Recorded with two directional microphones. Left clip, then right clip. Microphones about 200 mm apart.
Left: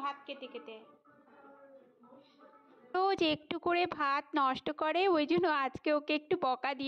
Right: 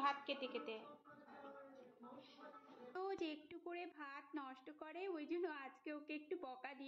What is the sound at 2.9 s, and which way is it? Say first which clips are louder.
A woman's voice: left 16 dB; 50° left (ahead or behind).